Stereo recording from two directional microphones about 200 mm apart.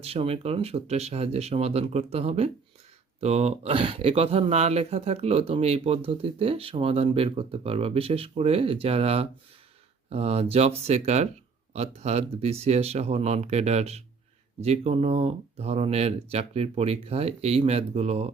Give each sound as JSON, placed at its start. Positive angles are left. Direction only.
{"t": 0.0, "sound": "speech", "side_deg": -30}